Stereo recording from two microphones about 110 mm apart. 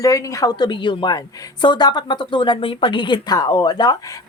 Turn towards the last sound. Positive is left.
turn(degrees=35)  # may be behind; listen again after turning